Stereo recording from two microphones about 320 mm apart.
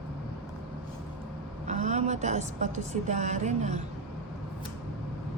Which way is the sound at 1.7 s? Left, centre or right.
Right.